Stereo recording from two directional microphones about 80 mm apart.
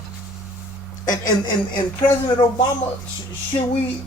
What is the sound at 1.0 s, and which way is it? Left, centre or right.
Speech, left.